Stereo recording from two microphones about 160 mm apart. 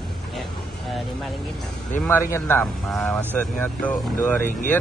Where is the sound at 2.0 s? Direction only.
15° left (ahead or behind).